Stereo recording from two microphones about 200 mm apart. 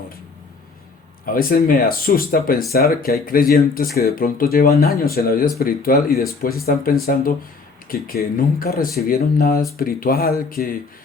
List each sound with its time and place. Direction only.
1.2 s speech: 45° left (ahead or behind)